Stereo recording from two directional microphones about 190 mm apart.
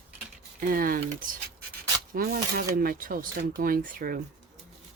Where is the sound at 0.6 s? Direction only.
50° right (ahead or behind).